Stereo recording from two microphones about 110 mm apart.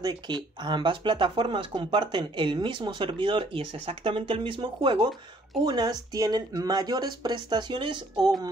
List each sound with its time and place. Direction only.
0.0 s speech: 40° right (ahead or behind)